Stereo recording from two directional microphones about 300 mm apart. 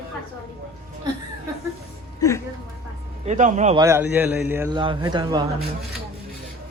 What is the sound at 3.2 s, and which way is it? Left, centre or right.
Speech, right.